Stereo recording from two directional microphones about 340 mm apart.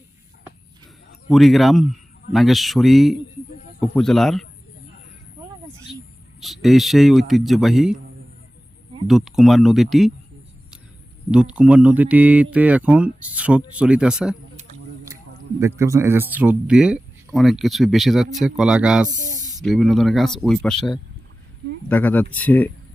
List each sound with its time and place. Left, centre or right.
1.3 s speech: centre
6.4 s speech: centre
9.0 s speech: centre
11.5 s speech: centre
15.6 s speech: centre
19.0 s a sound: right
19.6 s speech: centre